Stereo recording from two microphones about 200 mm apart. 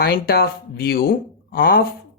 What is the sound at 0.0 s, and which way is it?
Mantra, 50° left (ahead or behind).